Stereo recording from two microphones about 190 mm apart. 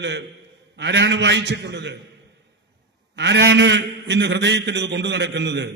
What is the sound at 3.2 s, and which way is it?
A man's voice, 70° right (ahead or behind).